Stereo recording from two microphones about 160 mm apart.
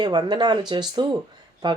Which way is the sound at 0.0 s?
25° right (ahead or behind).